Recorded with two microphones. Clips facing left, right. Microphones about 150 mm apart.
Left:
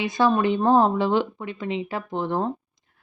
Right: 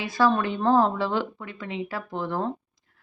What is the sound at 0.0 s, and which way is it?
Speech, 20° left (ahead or behind).